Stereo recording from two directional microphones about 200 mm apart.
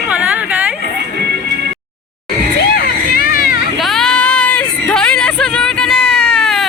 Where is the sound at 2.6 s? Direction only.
50° left (ahead or behind).